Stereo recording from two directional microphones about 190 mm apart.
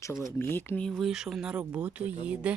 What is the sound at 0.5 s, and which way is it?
Speech, 10° left (ahead or behind).